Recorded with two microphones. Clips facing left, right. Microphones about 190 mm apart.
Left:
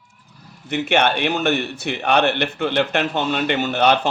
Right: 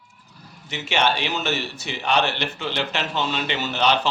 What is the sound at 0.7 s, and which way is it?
A man's voice, 55° left (ahead or behind).